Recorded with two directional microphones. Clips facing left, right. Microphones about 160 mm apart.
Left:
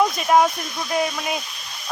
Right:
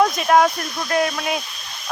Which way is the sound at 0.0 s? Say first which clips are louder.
Right 2 dB; centre (ahead or behind).